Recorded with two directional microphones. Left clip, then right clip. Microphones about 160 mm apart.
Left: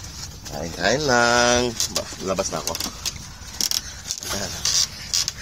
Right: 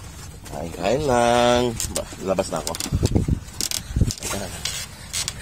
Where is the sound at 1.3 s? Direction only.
25° right (ahead or behind).